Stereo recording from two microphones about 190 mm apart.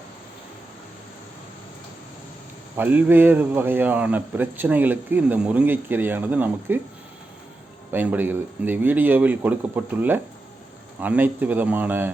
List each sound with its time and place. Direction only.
2.7 s a man's voice: 10° right (ahead or behind)
7.9 s a man's voice: 10° right (ahead or behind)